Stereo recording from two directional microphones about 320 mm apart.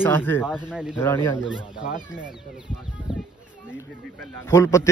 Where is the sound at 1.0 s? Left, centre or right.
Centre.